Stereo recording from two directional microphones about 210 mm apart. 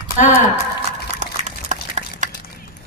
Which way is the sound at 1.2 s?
35° right (ahead or behind).